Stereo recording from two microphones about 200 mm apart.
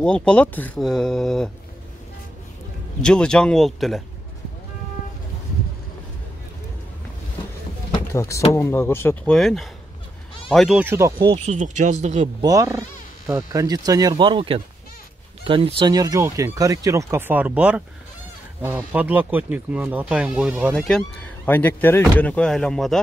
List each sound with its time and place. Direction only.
0.0 s speech: 5° left (ahead or behind)
3.0 s speech: 5° left (ahead or behind)
8.1 s speech: 15° left (ahead or behind); by 11.2 s 15° right (ahead or behind)
11.2 s speech: 30° right (ahead or behind)
12.4 s speech: 15° right (ahead or behind); by 22.9 s centre (ahead or behind)